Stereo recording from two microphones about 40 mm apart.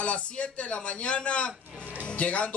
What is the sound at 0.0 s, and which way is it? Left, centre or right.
A man's voice, left.